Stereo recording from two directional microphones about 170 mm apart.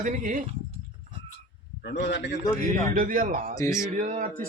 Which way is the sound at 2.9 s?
55° right (ahead or behind).